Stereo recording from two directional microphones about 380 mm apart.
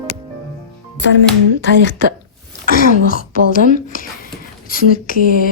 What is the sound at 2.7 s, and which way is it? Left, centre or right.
Speech, left.